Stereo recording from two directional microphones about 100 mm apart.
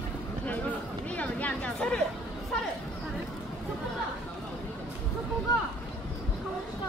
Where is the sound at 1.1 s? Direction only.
15° left (ahead or behind).